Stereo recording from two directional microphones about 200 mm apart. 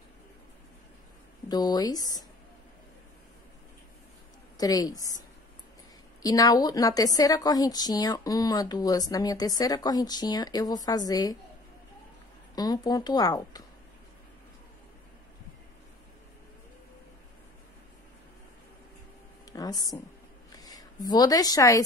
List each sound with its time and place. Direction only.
1.5 s a woman's voice: 20° left (ahead or behind)
4.6 s a woman's voice: 20° left (ahead or behind)
6.2 s a woman's voice: 20° left (ahead or behind)
12.5 s a woman's voice: 20° left (ahead or behind)
19.5 s a sound: 20° left (ahead or behind)
20.5 s speech: 20° left (ahead or behind)